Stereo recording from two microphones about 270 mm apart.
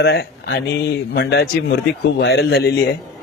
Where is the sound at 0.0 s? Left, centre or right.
Left.